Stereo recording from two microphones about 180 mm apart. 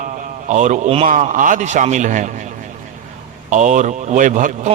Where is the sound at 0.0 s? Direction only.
40° right (ahead or behind).